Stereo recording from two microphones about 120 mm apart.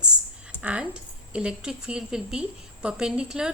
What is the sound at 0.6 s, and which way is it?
A woman's voice, 10° right (ahead or behind).